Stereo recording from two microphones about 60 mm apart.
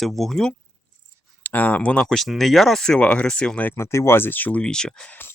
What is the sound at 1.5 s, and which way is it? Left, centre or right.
Speech, left.